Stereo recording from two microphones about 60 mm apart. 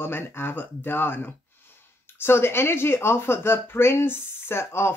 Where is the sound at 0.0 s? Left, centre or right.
Left.